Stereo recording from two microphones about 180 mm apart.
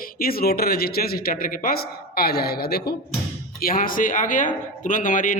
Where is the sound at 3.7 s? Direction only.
50° left (ahead or behind).